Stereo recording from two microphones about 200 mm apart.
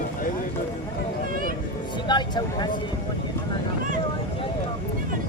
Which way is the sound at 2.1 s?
20° left (ahead or behind).